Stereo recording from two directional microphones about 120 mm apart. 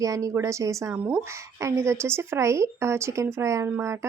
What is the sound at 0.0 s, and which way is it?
Speech, 30° right (ahead or behind).